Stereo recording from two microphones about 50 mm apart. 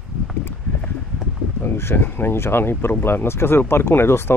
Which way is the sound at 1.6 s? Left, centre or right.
Left.